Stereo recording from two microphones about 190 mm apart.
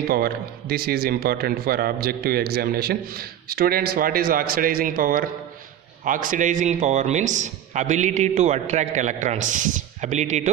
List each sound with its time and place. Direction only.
0.1 s a man's voice: 55° right (ahead or behind); by 10.5 s 35° right (ahead or behind)